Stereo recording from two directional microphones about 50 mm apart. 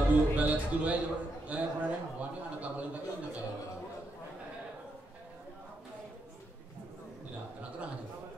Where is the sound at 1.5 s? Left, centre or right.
Right.